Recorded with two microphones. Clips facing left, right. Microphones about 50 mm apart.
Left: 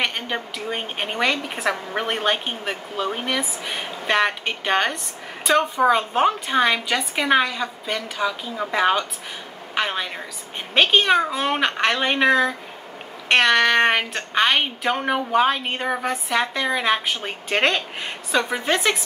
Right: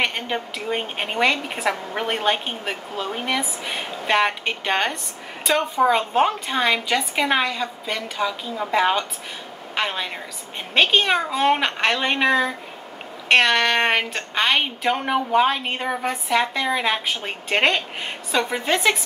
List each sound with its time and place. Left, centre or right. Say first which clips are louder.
0.3 s a woman's voice: right 1 dB; centre
14.1 s a woman's voice: left 2 dB; centre
14.5 s a woman's voice: even; centre
17.5 s speech: right 1 dB; centre
18.3 s a woman's voice: even; centre